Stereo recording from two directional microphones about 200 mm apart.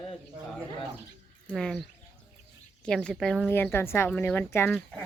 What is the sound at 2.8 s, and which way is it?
Speech, 5° left (ahead or behind).